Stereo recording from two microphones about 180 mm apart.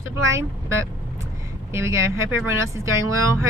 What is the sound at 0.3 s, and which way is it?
Speech, 15° right (ahead or behind).